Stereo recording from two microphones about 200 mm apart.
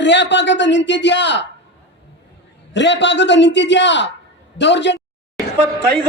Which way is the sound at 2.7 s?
60° left (ahead or behind).